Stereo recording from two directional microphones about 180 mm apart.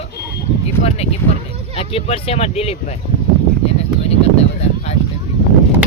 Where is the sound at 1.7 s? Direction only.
35° left (ahead or behind).